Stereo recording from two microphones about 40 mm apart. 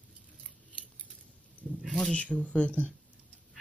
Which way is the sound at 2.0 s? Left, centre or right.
Left.